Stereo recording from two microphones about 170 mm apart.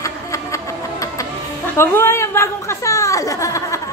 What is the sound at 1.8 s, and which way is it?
Chuckle, 15° left (ahead or behind).